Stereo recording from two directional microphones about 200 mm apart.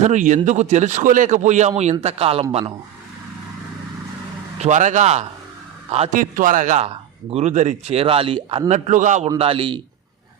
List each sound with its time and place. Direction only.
0.0 s speech: 40° right (ahead or behind)
4.6 s speech: 35° right (ahead or behind)
8.9 s speech: 40° right (ahead or behind)
9.4 s a man's voice: 25° right (ahead or behind)